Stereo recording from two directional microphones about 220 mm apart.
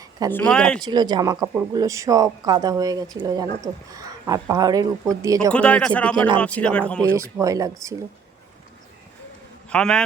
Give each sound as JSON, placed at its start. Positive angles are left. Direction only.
{"t": 0.3, "sound": "speech", "side_deg": 5}
{"t": 0.8, "sound": "speech", "side_deg": -20}
{"t": 5.5, "sound": "speech", "side_deg": 5}
{"t": 7.1, "sound": "speech", "side_deg": -10}
{"t": 9.6, "sound": "a man's voice", "side_deg": 5}